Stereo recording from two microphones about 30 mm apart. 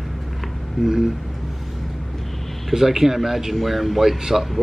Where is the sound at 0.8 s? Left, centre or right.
Centre.